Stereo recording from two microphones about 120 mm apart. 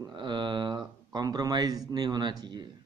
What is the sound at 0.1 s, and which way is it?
Speech, 40° right (ahead or behind).